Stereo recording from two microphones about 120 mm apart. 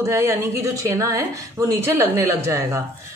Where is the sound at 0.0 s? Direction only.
25° right (ahead or behind).